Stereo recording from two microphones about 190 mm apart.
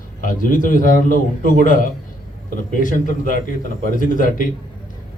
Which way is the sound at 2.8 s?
45° left (ahead or behind).